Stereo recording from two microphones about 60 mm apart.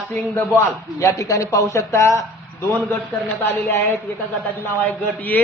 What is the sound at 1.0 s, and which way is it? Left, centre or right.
Speech, left.